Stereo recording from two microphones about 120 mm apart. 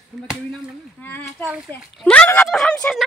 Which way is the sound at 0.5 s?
15° left (ahead or behind).